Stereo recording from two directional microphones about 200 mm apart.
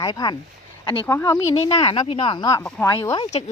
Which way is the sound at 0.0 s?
20° left (ahead or behind).